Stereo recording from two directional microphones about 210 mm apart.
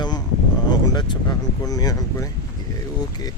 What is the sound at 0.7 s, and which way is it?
Speech, 20° left (ahead or behind).